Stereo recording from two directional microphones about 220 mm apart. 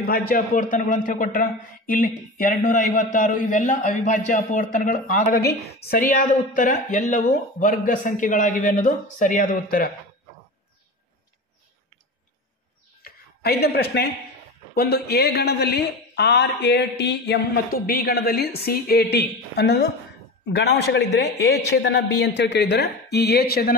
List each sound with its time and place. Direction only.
0.0 s a man's voice: 40° left (ahead or behind)
13.0 s a sound: 45° left (ahead or behind)
14.8 s a man's voice: 45° left (ahead or behind)